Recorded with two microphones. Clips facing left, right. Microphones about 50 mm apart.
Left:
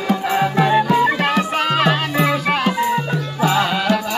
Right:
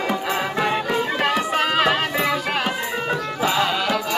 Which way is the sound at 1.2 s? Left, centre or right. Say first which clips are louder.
Left 2 dB; centre.